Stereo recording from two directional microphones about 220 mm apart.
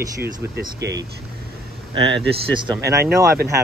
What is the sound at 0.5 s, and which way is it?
Speech, 50° right (ahead or behind).